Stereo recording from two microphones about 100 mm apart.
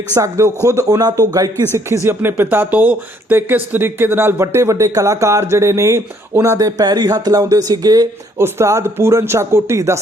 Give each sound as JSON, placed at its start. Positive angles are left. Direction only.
{"t": 0.1, "sound": "speech", "side_deg": -35}
{"t": 1.7, "sound": "speech", "side_deg": -25}
{"t": 8.4, "sound": "speech", "side_deg": -30}